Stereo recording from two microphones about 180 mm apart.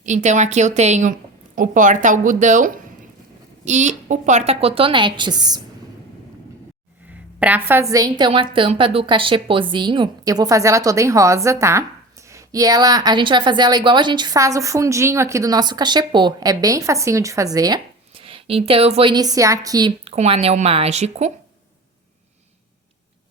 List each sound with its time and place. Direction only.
0.0 s speech: 40° right (ahead or behind); by 5.6 s 20° right (ahead or behind)
7.3 s a woman's voice: 10° right (ahead or behind)
8.2 s a woman's voice: 30° right (ahead or behind)
18.2 s a woman's voice: 30° right (ahead or behind)
20.1 s speech: 35° right (ahead or behind)